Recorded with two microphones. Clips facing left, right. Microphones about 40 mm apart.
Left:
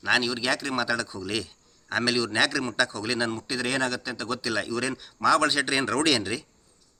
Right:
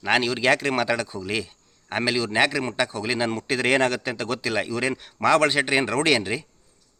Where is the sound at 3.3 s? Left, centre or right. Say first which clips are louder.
Right 6 dB; right.